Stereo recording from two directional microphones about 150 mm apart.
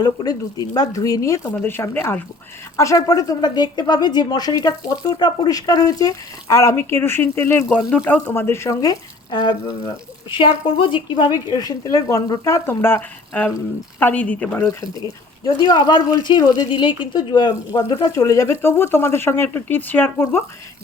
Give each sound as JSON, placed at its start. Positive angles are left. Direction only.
{"t": 0.0, "sound": "a woman's voice", "side_deg": 25}